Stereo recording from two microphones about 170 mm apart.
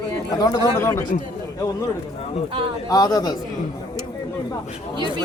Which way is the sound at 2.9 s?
20° left (ahead or behind).